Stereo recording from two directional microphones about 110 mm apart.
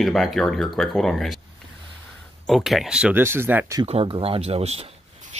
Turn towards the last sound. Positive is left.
turn(degrees=-65)  # may be behind; listen again after turning